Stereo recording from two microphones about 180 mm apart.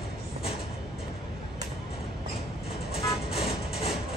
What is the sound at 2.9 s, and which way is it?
Vehicle, 30° left (ahead or behind).